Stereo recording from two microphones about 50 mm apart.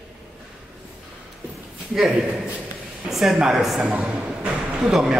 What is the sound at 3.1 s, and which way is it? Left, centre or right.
Speech, centre.